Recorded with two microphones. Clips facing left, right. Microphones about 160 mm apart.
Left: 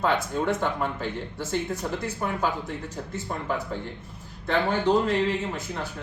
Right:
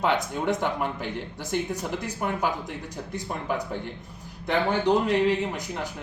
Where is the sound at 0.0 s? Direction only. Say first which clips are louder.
Even; 20° right (ahead or behind).